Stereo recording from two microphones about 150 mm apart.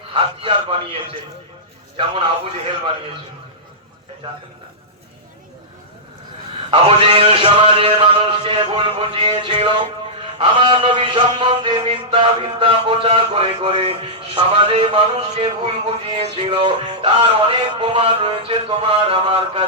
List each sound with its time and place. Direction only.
0.1 s music: 35° right (ahead or behind)
6.7 s a man's voice: 40° right (ahead or behind)
10.3 s music: 35° right (ahead or behind)